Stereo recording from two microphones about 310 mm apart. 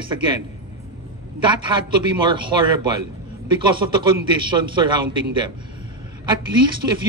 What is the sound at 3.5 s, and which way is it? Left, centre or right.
A man's voice, centre.